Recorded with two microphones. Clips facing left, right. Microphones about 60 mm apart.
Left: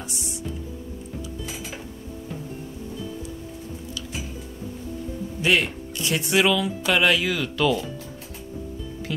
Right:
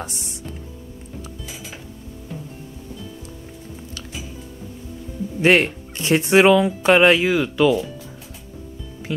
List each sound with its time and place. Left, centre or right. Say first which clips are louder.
0.0 s music: right 2 dB; right
5.4 s speech: right 6 dB; right; by 7.8 s centre